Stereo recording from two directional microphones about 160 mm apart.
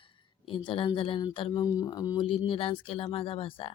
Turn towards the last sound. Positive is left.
turn(degrees=35)  # may be behind; listen again after turning